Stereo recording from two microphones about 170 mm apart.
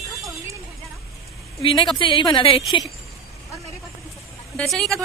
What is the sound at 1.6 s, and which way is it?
A woman's voice, 30° left (ahead or behind).